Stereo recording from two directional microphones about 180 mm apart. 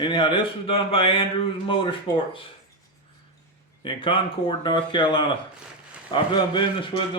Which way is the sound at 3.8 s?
30° left (ahead or behind).